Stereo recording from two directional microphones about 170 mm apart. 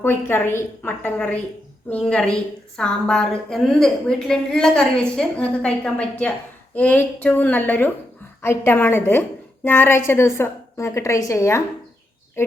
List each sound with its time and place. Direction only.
0.0 s a woman's voice: 10° left (ahead or behind)